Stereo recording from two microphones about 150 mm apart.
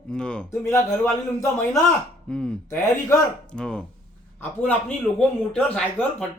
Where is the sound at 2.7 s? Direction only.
20° left (ahead or behind).